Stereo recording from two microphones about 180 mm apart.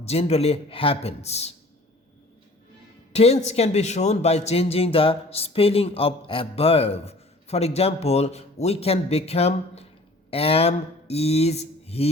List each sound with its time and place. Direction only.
0.0 s a man's voice: 35° left (ahead or behind)
3.1 s a man's voice: 35° left (ahead or behind)
10.3 s a sound: 35° left (ahead or behind)